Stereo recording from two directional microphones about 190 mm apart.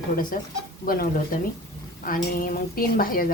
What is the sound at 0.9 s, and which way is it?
A woman's voice, 50° left (ahead or behind).